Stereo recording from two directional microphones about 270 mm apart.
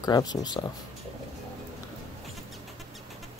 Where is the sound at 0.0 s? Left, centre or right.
Centre.